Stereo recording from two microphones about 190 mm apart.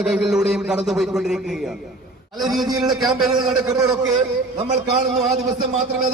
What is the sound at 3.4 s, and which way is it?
Speech, 20° right (ahead or behind).